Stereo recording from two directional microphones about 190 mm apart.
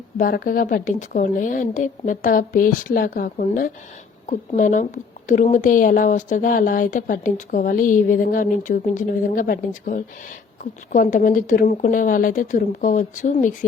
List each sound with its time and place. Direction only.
0.2 s a woman's voice: 50° left (ahead or behind)